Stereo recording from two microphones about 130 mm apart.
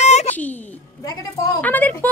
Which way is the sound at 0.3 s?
10° left (ahead or behind).